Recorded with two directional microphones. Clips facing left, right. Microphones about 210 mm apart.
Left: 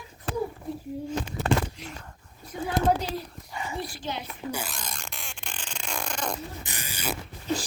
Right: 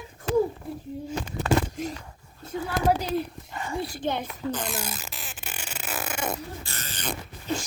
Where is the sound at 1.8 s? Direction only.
50° right (ahead or behind).